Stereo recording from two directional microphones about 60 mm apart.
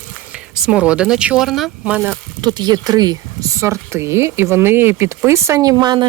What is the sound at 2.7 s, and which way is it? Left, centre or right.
Speech, right.